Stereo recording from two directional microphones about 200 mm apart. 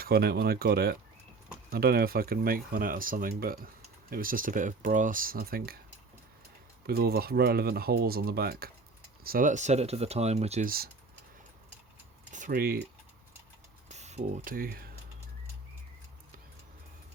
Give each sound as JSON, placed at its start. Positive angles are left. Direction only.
{"t": 0.0, "sound": "speech", "side_deg": -50}
{"t": 6.8, "sound": "speech", "side_deg": -50}
{"t": 12.3, "sound": "speech", "side_deg": -45}
{"t": 13.8, "sound": "speech", "side_deg": -35}